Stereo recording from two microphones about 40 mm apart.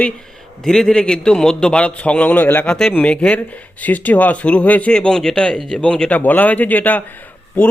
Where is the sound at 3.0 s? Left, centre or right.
Left.